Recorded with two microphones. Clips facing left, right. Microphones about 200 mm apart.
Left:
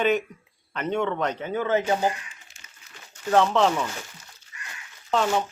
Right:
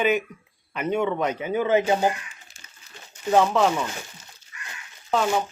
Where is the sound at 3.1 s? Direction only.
10° right (ahead or behind).